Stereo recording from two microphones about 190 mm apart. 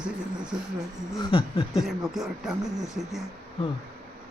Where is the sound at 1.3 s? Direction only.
30° left (ahead or behind).